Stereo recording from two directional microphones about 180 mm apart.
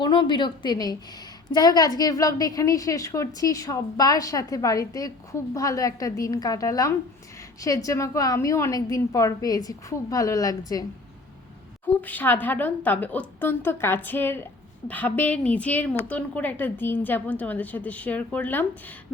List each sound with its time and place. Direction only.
0.0 s a woman's voice: 25° left (ahead or behind)
12.0 s a woman's voice: 10° left (ahead or behind)